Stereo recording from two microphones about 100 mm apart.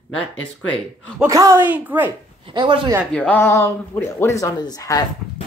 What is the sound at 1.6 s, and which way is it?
Speech, 20° right (ahead or behind).